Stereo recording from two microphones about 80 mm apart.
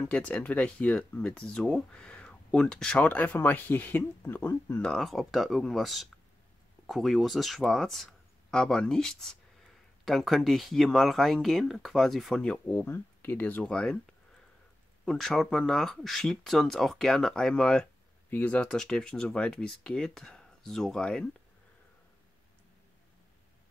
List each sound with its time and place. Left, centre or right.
0.0 s speech: centre
3.0 s speech: left
4.8 s speech: centre
12.4 s speech: centre
12.7 s speech: left
13.7 s speech: centre
15.0 s speech: centre
18.7 s speech: centre